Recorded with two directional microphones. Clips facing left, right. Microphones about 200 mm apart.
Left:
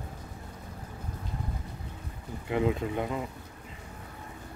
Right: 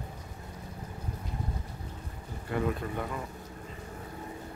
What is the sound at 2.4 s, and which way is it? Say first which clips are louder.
Speech: left 3 dB; 20° left (ahead or behind).